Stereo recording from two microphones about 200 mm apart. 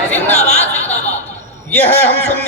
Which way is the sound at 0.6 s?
10° left (ahead or behind).